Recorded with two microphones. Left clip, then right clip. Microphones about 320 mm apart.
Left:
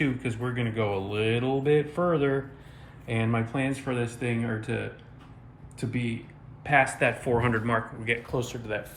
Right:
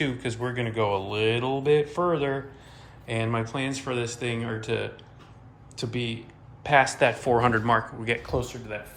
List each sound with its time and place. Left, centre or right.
0.0 s speech: centre
5.9 s speech: centre